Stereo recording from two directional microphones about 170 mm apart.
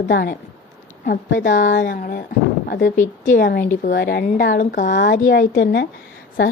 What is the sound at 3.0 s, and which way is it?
A woman's voice, 50° left (ahead or behind).